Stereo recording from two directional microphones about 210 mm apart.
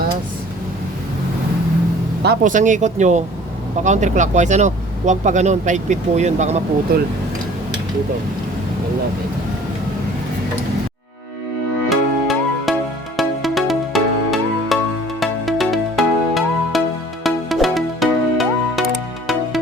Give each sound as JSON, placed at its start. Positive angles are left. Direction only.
{"t": 2.2, "sound": "speech", "side_deg": -40}
{"t": 6.9, "sound": "speech", "side_deg": -45}
{"t": 11.9, "sound": "music", "side_deg": 0}